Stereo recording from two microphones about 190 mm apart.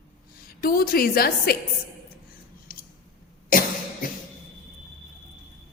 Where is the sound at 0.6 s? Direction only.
50° left (ahead or behind).